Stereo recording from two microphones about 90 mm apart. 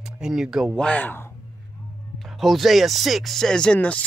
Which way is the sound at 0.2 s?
5° right (ahead or behind).